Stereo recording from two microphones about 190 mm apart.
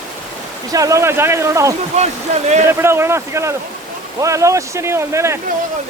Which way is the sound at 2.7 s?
15° right (ahead or behind).